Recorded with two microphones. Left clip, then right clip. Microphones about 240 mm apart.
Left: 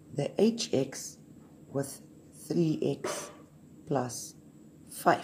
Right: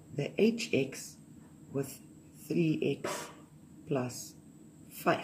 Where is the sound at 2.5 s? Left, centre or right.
Centre.